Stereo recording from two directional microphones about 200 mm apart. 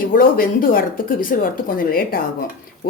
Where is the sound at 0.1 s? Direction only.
45° left (ahead or behind).